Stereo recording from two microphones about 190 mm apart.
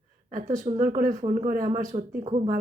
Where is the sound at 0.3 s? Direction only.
45° right (ahead or behind).